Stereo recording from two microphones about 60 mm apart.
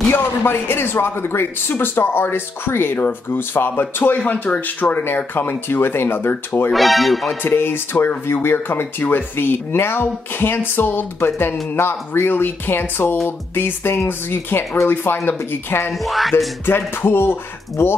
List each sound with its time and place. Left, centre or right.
0.1 s speech: left
6.7 s speech: centre
7.4 s speech: left
15.9 s speech: centre
16.6 s speech: left